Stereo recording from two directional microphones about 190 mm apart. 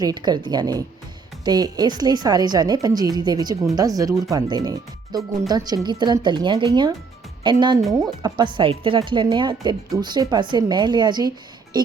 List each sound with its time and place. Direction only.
0.0 s speech: 20° right (ahead or behind)